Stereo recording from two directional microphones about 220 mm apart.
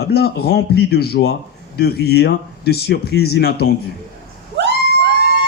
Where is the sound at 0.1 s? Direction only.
45° left (ahead or behind).